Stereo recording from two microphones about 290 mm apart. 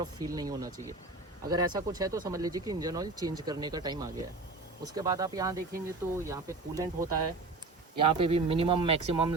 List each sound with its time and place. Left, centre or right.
0.0 s speech: centre